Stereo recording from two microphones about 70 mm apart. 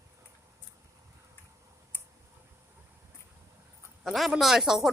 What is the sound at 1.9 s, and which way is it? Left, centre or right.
Clicking, left.